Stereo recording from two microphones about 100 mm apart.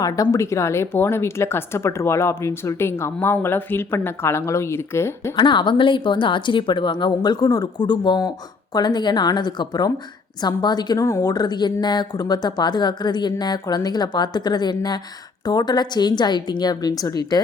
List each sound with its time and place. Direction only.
0.0 s a woman's voice: 35° left (ahead or behind)
5.4 s speech: 50° left (ahead or behind)